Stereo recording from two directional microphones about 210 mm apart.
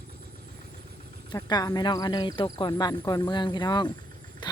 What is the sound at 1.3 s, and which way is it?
Speech, 20° left (ahead or behind).